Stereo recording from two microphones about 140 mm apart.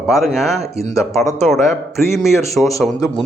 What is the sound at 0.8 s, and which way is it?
Speech, 20° left (ahead or behind).